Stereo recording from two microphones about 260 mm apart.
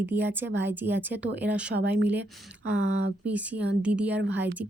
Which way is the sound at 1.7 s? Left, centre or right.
Right.